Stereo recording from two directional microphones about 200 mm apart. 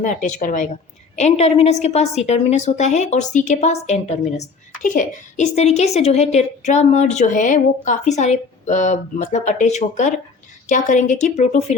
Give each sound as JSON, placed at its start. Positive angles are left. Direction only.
{"t": 0.0, "sound": "a woman's voice", "side_deg": 40}